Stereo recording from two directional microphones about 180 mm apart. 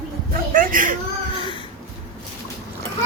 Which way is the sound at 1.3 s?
30° left (ahead or behind).